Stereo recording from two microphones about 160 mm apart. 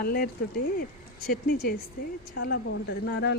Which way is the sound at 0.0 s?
75° left (ahead or behind).